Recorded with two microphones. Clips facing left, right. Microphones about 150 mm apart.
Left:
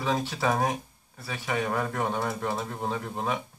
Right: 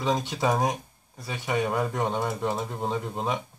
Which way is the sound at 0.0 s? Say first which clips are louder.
Right 2 dB; 15° right (ahead or behind).